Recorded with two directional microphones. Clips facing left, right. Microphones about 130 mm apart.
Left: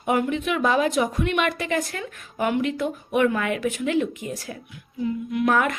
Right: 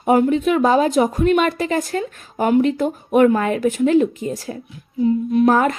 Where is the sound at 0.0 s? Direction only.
35° right (ahead or behind).